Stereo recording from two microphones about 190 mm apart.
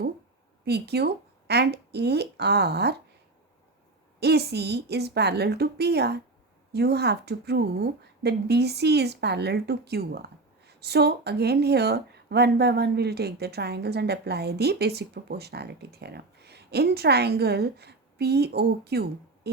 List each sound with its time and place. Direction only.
0.6 s speech: 60° right (ahead or behind)
4.2 s speech: 60° right (ahead or behind)